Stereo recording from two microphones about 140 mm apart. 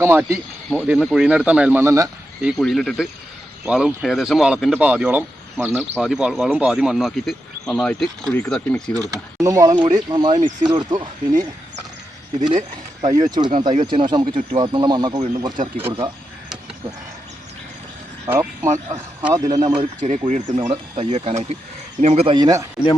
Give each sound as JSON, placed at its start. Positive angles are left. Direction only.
{"t": 0.0, "sound": "speech", "side_deg": -15}
{"t": 0.7, "sound": "speech", "side_deg": -5}
{"t": 1.8, "sound": "speech", "side_deg": -20}
{"t": 2.4, "sound": "speech", "side_deg": -5}
{"t": 9.0, "sound": "speech", "side_deg": -25}
{"t": 13.0, "sound": "speech", "side_deg": -25}
{"t": 18.3, "sound": "speech", "side_deg": -20}
{"t": 20.0, "sound": "speech", "side_deg": -55}
{"t": 22.3, "sound": "speech", "side_deg": -25}